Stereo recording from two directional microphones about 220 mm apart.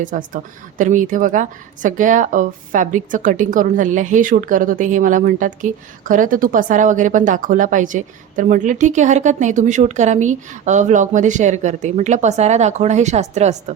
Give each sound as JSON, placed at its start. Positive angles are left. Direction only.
{"t": 0.0, "sound": "speech", "side_deg": -35}